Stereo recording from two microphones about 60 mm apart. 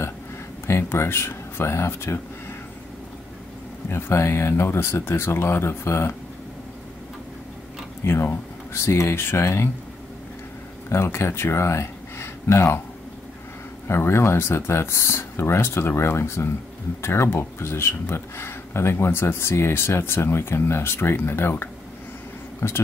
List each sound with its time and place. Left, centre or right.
0.7 s speech: left
3.9 s speech: left
8.0 s speech: left
10.9 s speech: left
13.8 s speech: left